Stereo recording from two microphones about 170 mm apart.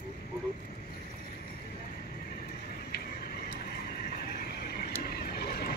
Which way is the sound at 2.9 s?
60° left (ahead or behind).